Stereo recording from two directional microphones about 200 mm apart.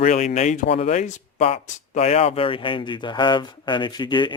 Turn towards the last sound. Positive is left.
turn(degrees=25)  # may be behind; listen again after turning